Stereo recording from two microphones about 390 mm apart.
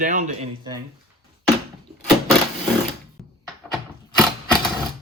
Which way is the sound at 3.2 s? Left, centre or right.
Centre.